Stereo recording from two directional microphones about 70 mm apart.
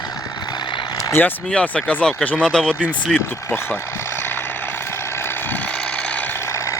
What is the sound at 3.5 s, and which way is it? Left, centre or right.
Vehicle, left.